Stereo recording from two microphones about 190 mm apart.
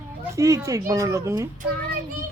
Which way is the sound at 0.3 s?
15° right (ahead or behind).